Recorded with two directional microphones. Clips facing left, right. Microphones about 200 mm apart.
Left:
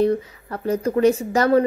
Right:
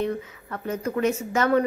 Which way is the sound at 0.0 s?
35° left (ahead or behind).